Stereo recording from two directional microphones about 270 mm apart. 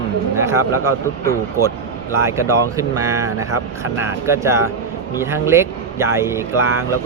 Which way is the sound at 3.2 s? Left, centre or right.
Right.